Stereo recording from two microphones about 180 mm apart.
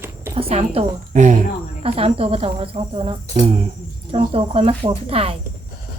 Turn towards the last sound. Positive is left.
turn(degrees=-30)  # may be behind; listen again after turning